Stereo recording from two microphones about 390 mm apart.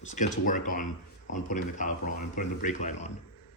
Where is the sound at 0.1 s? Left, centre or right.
Centre.